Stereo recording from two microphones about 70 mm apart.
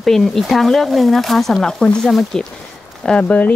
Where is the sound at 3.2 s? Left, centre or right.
Left.